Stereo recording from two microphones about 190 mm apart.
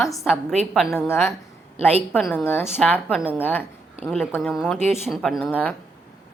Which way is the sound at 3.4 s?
10° left (ahead or behind).